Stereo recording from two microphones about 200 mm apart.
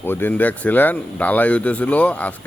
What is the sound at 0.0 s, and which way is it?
Speech, 10° left (ahead or behind).